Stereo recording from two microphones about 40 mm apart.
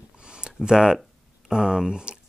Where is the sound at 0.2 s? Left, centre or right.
Right.